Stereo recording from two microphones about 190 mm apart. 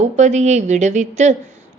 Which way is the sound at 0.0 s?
40° right (ahead or behind).